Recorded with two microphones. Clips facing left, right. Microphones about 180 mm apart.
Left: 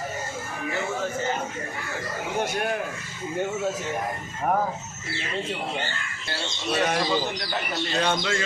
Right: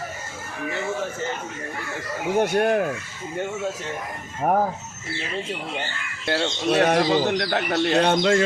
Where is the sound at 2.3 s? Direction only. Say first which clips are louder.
Right 8 dB; 60° right (ahead or behind).